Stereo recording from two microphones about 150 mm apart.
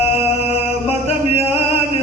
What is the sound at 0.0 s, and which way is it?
Chant, 45° left (ahead or behind).